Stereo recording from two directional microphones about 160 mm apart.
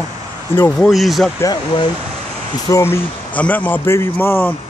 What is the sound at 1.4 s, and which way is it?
Speech, 25° left (ahead or behind).